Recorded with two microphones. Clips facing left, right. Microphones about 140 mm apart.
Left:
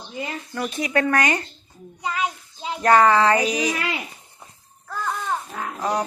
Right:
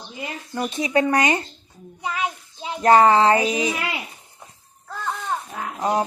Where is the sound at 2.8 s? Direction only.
25° right (ahead or behind).